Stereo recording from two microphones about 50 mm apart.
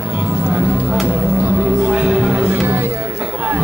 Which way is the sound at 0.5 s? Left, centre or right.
Right.